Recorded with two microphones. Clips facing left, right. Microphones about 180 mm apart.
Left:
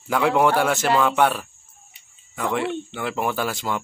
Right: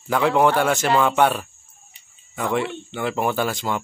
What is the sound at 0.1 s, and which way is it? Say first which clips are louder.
Speech: right 1 dB; 5° left (ahead or behind).